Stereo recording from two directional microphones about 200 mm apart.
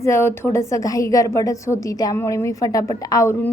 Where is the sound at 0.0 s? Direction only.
15° left (ahead or behind).